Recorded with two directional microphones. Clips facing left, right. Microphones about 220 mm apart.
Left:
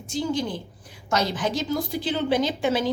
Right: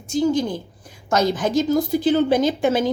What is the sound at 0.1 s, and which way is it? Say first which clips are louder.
A woman's voice: right 7 dB; 45° right (ahead or behind).